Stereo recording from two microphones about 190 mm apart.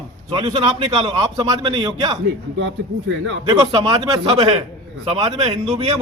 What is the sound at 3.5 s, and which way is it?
A man's voice, 25° right (ahead or behind).